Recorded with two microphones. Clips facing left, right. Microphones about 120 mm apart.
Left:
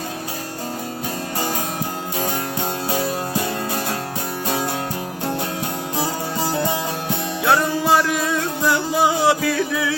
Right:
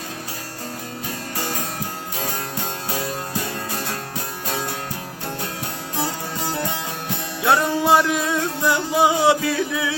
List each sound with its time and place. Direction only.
7.5 s music: 20° right (ahead or behind)